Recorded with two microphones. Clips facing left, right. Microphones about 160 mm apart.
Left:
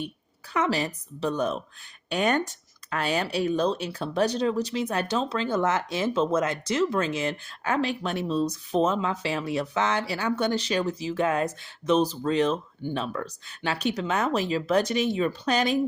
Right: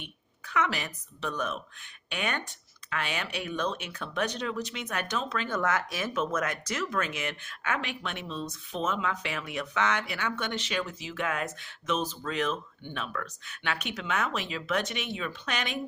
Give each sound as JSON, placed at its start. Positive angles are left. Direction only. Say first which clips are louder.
{"t": 0.0, "sound": "speech", "louder": "left 11 dB", "side_deg": 35}